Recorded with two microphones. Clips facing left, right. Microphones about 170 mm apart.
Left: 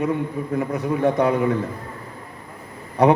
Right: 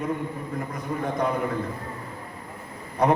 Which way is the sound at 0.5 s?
75° left (ahead or behind).